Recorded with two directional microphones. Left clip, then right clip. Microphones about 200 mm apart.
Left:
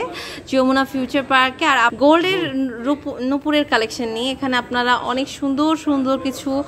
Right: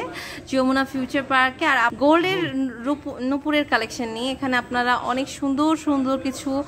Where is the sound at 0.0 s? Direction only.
5° left (ahead or behind).